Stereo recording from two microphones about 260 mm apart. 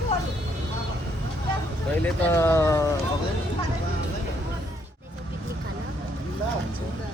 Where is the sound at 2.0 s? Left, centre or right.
Centre.